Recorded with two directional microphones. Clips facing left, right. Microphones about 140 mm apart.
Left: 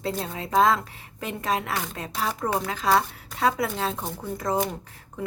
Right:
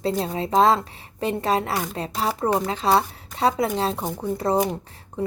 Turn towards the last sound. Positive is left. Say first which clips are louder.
# right 4 dB
turn(degrees=-30)  # may be behind; listen again after turning